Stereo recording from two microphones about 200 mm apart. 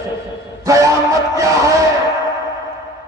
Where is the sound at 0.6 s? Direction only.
15° right (ahead or behind).